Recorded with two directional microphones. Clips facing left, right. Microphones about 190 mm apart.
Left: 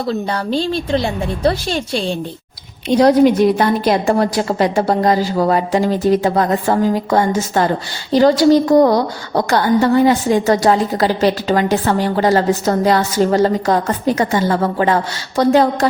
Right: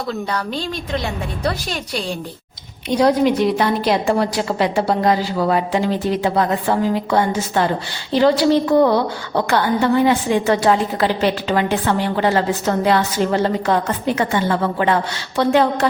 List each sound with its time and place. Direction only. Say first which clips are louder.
0.1 s a woman's voice: left 5 dB; 30° left (ahead or behind)
3.0 s a woman's voice: left 4 dB; 45° left (ahead or behind)